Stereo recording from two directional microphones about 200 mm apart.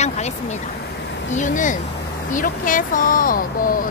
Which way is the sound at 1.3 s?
40° left (ahead or behind).